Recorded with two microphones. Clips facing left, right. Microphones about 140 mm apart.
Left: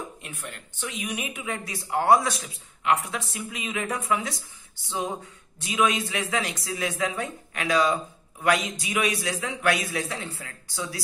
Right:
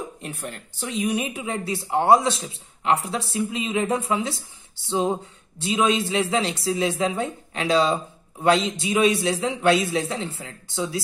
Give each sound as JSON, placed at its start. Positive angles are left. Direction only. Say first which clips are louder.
{"t": 0.2, "sound": "speech", "louder": "right 6 dB", "side_deg": -35}